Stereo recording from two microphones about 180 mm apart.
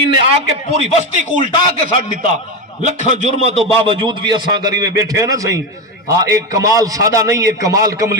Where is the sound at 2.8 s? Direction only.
40° right (ahead or behind).